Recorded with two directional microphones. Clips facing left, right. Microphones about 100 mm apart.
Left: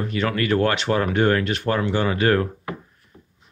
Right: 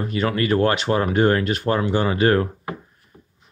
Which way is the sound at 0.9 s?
25° right (ahead or behind).